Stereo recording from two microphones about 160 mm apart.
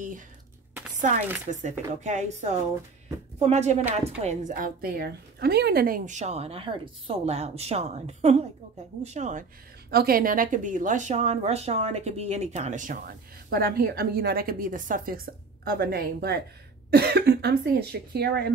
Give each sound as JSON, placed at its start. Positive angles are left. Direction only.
{"t": 1.5, "sound": "a woman's voice", "side_deg": -50}
{"t": 9.8, "sound": "speech", "side_deg": -75}
{"t": 16.9, "sound": "speech", "side_deg": -90}